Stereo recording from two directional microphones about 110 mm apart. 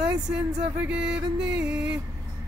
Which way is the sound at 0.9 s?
10° right (ahead or behind).